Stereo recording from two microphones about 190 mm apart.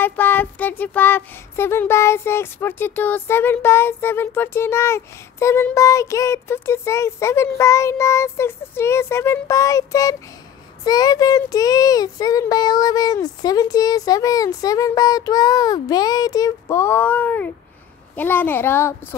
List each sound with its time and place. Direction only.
0.0 s speech: 10° left (ahead or behind)